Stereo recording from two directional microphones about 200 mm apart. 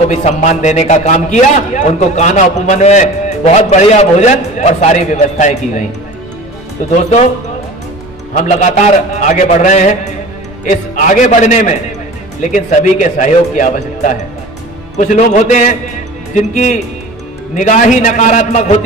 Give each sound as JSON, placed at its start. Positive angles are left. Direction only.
{"t": 0.1, "sound": "a man's voice", "side_deg": 35}
{"t": 7.0, "sound": "a man's voice", "side_deg": 35}
{"t": 8.4, "sound": "a man's voice", "side_deg": 35}